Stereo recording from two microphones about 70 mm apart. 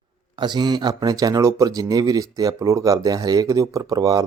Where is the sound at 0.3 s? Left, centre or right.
Right.